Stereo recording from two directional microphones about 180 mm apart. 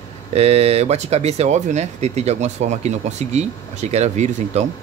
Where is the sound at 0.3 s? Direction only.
35° right (ahead or behind).